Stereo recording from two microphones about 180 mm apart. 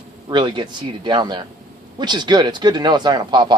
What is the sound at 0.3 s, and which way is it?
Speech, 25° right (ahead or behind).